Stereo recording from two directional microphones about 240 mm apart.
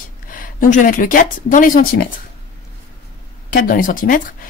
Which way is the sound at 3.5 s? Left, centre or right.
Left.